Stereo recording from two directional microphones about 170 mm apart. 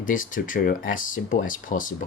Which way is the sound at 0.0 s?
50° left (ahead or behind).